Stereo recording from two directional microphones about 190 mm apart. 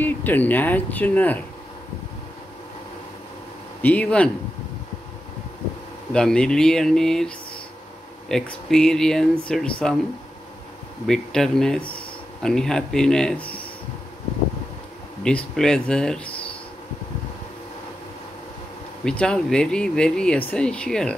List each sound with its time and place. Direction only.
0.0 s speech: 10° left (ahead or behind)
3.8 s speech: 5° left (ahead or behind)
6.1 s speech: 5° left (ahead or behind)
11.1 s speech: centre (ahead or behind)
15.2 s speech: 5° left (ahead or behind)
19.0 s speech: 5° left (ahead or behind)